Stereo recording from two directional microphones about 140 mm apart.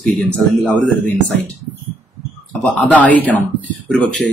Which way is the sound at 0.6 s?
5° left (ahead or behind).